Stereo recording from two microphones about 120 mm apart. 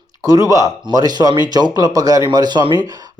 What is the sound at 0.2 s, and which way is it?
Speech, 30° right (ahead or behind).